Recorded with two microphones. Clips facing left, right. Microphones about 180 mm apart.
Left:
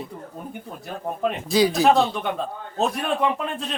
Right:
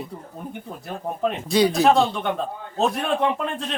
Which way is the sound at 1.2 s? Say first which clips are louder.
Even; centre (ahead or behind).